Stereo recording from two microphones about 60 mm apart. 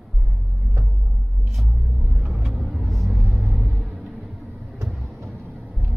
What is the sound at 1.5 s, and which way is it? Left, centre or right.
Vehicle, centre.